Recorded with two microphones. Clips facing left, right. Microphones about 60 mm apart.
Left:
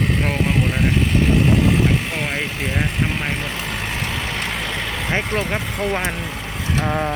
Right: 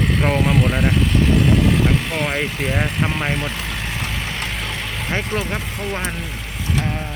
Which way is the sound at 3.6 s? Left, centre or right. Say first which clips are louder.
Left 1 dB; left.